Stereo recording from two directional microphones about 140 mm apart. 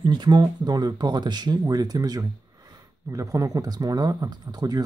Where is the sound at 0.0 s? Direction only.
30° right (ahead or behind).